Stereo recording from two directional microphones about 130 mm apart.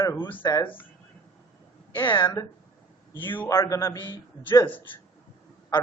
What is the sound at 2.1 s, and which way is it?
Speech, 25° left (ahead or behind).